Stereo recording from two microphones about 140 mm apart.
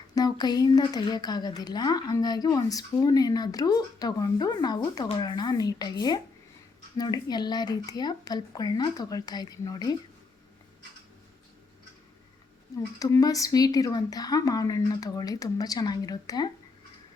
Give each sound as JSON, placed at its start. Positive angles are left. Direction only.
{"t": 0.1, "sound": "speech", "side_deg": 30}
{"t": 13.0, "sound": "speech", "side_deg": 25}